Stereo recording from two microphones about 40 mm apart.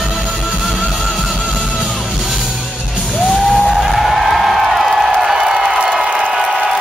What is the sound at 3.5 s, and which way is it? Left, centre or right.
Music, centre.